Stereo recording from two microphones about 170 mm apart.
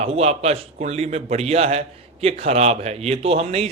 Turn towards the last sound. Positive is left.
turn(degrees=-40)  # may be behind; listen again after turning